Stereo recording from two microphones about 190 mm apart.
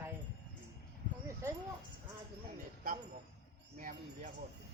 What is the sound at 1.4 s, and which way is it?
Speech, 15° right (ahead or behind).